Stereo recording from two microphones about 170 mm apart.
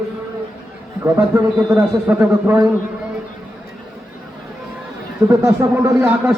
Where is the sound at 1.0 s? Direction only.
15° right (ahead or behind).